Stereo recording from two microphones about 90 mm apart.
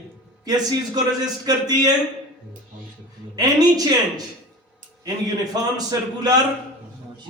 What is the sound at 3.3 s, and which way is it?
Speech, 45° right (ahead or behind).